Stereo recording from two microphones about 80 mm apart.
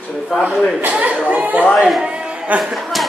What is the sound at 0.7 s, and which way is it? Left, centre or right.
Speech, right.